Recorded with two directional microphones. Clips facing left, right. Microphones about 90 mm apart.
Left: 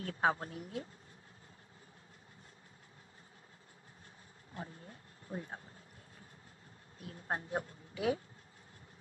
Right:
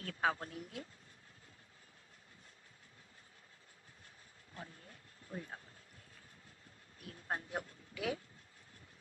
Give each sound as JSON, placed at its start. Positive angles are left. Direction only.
{"t": 0.0, "sound": "a woman's voice", "side_deg": 30}
{"t": 4.6, "sound": "a sound", "side_deg": 25}
{"t": 7.0, "sound": "speech", "side_deg": 25}